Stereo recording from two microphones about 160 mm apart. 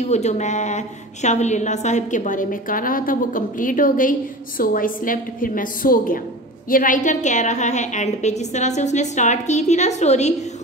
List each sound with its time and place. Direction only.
0.0 s a woman's voice: 45° left (ahead or behind)